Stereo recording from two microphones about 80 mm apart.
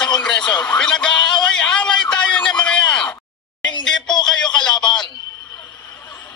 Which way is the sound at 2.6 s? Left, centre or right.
Centre.